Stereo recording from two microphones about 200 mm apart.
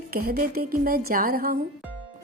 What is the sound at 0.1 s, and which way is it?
A woman's voice, 50° right (ahead or behind).